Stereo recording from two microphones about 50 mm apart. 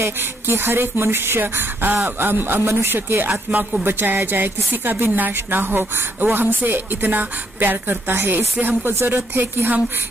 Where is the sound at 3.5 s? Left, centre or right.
Right.